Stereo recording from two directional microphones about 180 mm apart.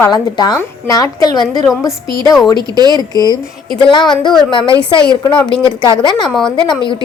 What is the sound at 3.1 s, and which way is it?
Speech, 20° left (ahead or behind).